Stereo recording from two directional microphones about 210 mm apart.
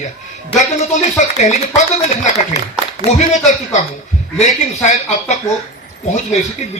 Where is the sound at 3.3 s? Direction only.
35° left (ahead or behind).